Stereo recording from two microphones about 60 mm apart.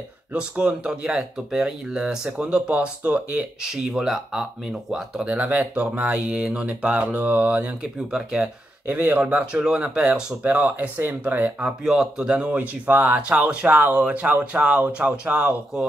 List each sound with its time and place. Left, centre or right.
0.3 s speech: centre
3.7 s speech: centre
5.2 s speech: right
8.8 s speech: right
11.8 s speech: centre